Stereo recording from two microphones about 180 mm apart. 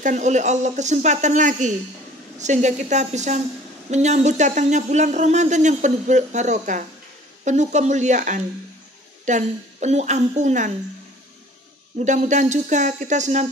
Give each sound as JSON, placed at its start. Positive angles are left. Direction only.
{"t": 0.0, "sound": "speech", "side_deg": -45}
{"t": 12.0, "sound": "speech", "side_deg": -40}